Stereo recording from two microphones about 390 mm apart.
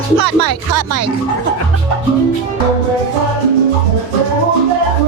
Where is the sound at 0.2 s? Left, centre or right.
Right.